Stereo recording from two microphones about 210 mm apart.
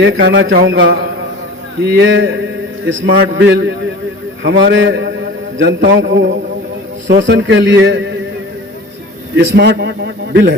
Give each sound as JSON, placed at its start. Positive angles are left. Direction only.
{"t": 0.0, "sound": "a man's voice", "side_deg": -55}
{"t": 3.3, "sound": "a man's voice", "side_deg": -55}
{"t": 9.3, "sound": "a man's voice", "side_deg": -50}